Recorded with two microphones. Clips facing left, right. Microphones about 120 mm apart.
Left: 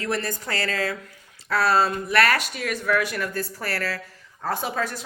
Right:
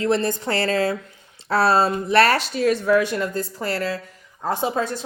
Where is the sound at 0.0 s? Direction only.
25° right (ahead or behind).